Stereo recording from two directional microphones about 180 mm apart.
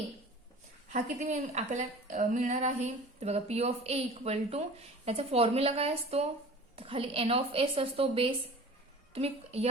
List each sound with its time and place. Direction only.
0.9 s a woman's voice: 40° right (ahead or behind)